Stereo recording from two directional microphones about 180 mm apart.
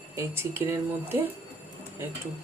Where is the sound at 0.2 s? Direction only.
15° right (ahead or behind).